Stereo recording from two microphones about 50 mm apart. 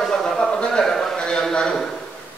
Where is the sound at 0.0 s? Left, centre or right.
Centre.